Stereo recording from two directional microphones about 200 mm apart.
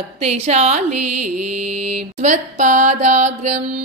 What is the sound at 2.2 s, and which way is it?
Mantra, 40° right (ahead or behind).